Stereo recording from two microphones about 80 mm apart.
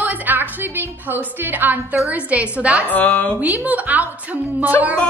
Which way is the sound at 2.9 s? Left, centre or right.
Left.